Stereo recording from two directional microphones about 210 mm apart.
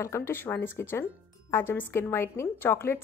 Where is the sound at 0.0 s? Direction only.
10° left (ahead or behind).